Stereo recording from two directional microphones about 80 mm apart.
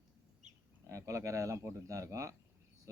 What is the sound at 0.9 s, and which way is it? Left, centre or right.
Speech, right.